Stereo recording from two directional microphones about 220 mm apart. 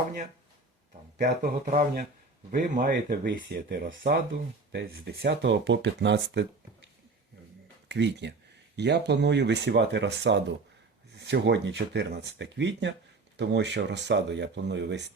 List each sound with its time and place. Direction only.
1.2 s speech: 40° right (ahead or behind)
2.7 s speech: 50° right (ahead or behind)
7.9 s speech: 50° right (ahead or behind)